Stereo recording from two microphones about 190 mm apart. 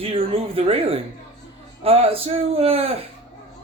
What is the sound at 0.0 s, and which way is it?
Speech, 30° right (ahead or behind).